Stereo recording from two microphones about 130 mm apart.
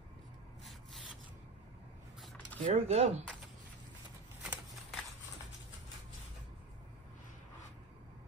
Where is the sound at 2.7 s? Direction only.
55° right (ahead or behind).